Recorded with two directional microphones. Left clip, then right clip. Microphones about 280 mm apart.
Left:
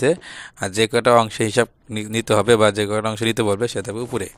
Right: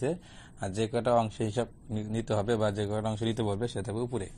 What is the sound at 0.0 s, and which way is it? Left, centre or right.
Speech, left.